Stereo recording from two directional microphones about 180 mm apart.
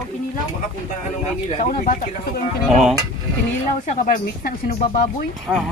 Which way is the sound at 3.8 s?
50° left (ahead or behind).